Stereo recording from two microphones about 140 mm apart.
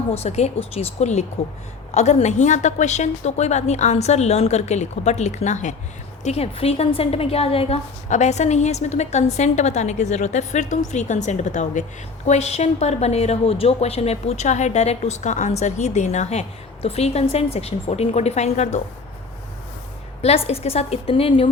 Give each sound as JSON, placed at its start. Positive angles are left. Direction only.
{"t": 0.1, "sound": "a woman's voice", "side_deg": 50}
{"t": 6.2, "sound": "a woman's voice", "side_deg": 50}
{"t": 8.1, "sound": "a woman's voice", "side_deg": 55}
{"t": 20.2, "sound": "a woman's voice", "side_deg": 45}